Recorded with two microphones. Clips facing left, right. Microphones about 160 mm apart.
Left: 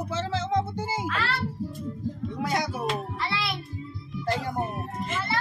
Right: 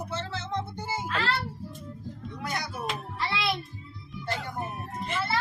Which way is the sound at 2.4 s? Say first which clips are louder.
Left 6 dB; 90° left.